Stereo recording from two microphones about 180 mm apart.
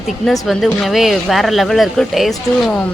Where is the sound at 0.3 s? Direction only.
Centre (ahead or behind).